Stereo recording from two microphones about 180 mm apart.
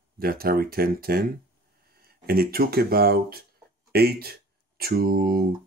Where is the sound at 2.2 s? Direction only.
55° right (ahead or behind).